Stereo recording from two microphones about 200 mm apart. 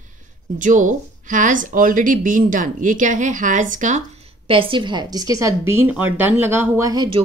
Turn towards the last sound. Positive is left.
turn(degrees=-20)  # may be behind; listen again after turning